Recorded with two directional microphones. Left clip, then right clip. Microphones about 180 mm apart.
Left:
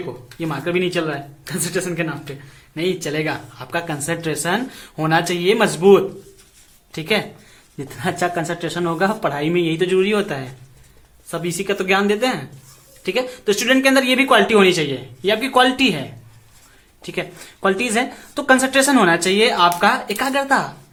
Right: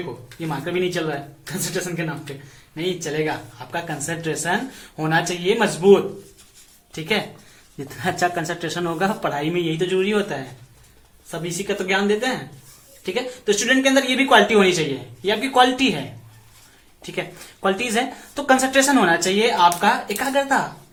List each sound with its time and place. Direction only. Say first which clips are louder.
0.3 s speech: left 3 dB; 35° left (ahead or behind)
2.7 s speech: left 2 dB; 35° left (ahead or behind)
17.0 s speech: left 2 dB; 30° left (ahead or behind)